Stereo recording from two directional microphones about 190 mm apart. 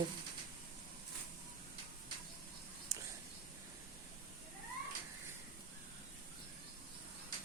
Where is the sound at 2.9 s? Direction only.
20° right (ahead or behind).